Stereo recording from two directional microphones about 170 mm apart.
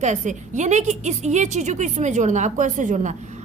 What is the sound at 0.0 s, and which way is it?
A woman's voice, 45° right (ahead or behind).